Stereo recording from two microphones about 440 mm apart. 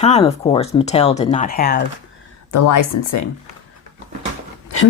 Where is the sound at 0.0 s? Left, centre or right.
Centre.